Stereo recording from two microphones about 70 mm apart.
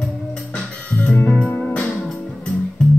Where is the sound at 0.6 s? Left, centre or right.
Centre.